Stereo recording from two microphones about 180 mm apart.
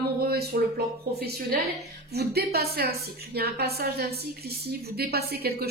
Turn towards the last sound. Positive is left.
turn(degrees=-60)  # may be behind; listen again after turning